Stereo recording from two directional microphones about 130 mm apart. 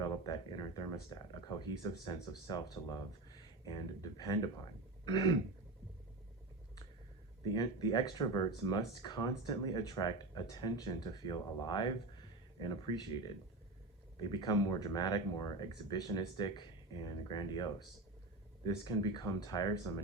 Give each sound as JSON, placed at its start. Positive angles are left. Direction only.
{"t": 0.0, "sound": "speech", "side_deg": 30}
{"t": 7.5, "sound": "speech", "side_deg": 35}